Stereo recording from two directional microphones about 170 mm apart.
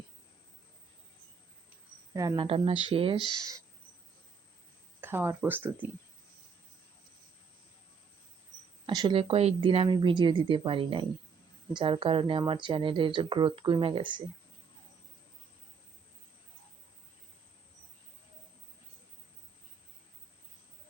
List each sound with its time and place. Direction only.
2.1 s speech: 25° right (ahead or behind)
4.9 s speech: 10° right (ahead or behind)
8.9 s speech: 25° right (ahead or behind)